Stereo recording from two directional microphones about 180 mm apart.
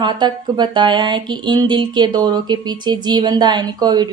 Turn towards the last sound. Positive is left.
turn(degrees=-25)  # may be behind; listen again after turning